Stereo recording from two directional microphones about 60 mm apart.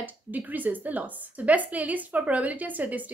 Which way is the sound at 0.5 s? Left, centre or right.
Right.